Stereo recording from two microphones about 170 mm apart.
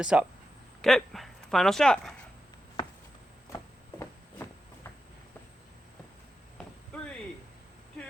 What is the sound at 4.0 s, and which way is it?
Walk, 15° left (ahead or behind).